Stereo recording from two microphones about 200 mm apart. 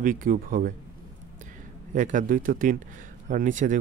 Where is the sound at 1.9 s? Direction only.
40° right (ahead or behind).